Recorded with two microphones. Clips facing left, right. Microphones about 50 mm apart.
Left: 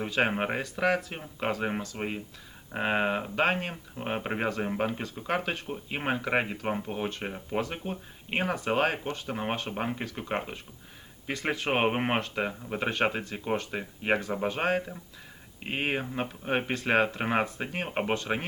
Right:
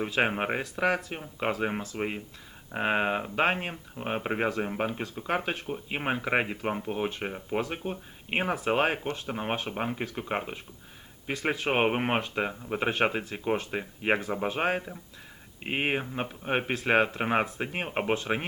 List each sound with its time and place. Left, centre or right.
0.0 s speech: centre
9.1 s speech: centre